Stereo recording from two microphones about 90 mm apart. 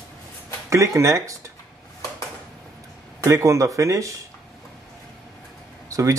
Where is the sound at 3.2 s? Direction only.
35° right (ahead or behind).